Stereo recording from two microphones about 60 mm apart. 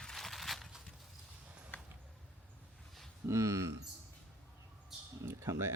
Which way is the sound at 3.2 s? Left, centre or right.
Right.